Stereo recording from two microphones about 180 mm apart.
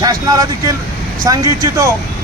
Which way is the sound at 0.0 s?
20° right (ahead or behind).